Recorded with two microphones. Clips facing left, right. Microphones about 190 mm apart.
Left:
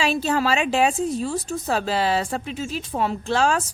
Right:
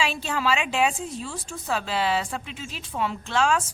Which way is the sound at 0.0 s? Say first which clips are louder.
Left 5 dB; 40° left (ahead or behind).